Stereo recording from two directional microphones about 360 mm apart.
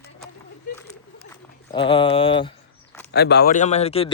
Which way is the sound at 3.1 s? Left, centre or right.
Left.